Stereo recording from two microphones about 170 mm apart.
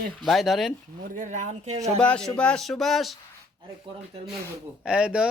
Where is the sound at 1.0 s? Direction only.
50° right (ahead or behind).